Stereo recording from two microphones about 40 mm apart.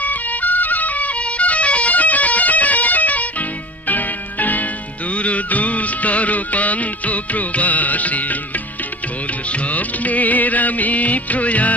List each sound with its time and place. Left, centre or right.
0.0 s music: left
5.1 s music: left
9.5 s music of bollywood: left